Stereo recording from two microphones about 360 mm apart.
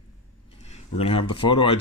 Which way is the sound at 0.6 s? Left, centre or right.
Centre.